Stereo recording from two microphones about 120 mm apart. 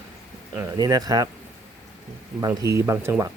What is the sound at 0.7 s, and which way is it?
Speech, 35° right (ahead or behind).